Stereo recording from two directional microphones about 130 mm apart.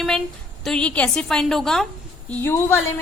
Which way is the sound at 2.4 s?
20° left (ahead or behind).